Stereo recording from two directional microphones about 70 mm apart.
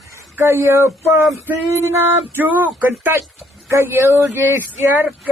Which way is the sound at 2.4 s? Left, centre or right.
Right.